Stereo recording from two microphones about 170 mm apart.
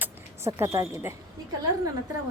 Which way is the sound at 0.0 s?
15° right (ahead or behind).